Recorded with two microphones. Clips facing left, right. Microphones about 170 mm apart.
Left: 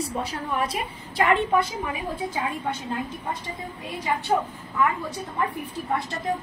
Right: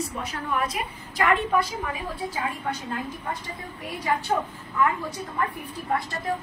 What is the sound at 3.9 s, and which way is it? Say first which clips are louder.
Speech: right 1 dB; 20° left (ahead or behind).